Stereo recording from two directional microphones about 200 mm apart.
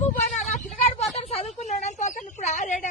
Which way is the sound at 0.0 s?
35° left (ahead or behind).